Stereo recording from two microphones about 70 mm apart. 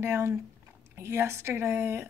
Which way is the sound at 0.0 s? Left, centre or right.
Right.